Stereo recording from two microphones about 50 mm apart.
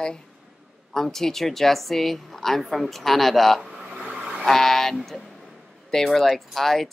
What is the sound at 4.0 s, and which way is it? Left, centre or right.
Vehicle, centre.